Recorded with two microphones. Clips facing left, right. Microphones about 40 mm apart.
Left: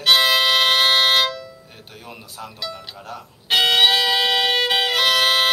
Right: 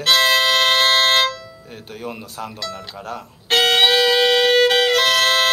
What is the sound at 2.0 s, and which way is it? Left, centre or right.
Speech, right.